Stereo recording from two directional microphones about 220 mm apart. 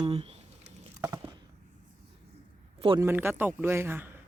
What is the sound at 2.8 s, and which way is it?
Speech, 25° right (ahead or behind).